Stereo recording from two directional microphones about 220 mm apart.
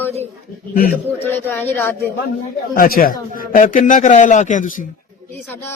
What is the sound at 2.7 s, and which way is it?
A man's voice, 40° left (ahead or behind).